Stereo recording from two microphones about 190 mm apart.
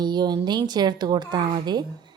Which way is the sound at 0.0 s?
20° right (ahead or behind).